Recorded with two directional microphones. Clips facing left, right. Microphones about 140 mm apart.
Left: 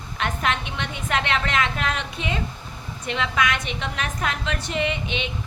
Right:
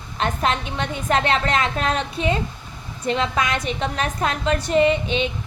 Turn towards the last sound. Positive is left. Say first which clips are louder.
# right 8 dB
turn(degrees=-35)  # may be behind; listen again after turning